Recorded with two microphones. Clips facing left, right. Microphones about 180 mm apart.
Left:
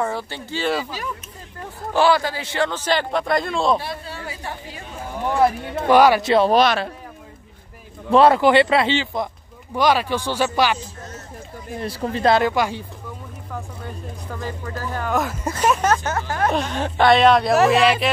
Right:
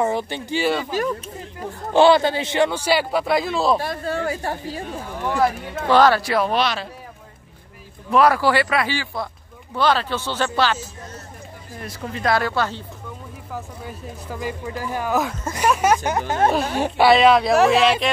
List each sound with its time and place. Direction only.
0.0 s a man's voice: 20° right (ahead or behind)
0.9 s speech: 50° right (ahead or behind)
2.0 s a man's voice: 25° right (ahead or behind); by 3.8 s 5° right (ahead or behind)
3.8 s speech: 50° right (ahead or behind)
5.9 s speech: 15° left (ahead or behind)
6.2 s speech: 25° left (ahead or behind)
6.5 s speech: 50° left (ahead or behind)
8.1 s speech: 25° left (ahead or behind)
11.8 s speech: 30° left (ahead or behind); by 12.8 s 15° left (ahead or behind)
13.5 s a man's voice: 5° right (ahead or behind); by 16.5 s 20° right (ahead or behind)
16.7 s speech: 10° right (ahead or behind)